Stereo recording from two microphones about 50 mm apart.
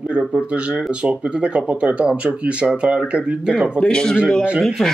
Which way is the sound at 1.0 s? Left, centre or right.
Right.